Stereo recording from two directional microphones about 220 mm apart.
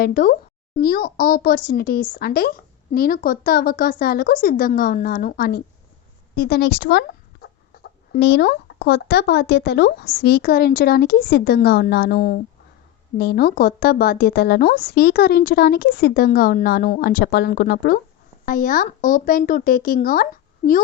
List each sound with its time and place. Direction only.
0.0 s speech: 40° left (ahead or behind)